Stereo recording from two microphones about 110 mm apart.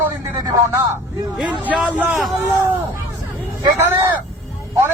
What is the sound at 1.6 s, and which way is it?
Speech, 10° right (ahead or behind).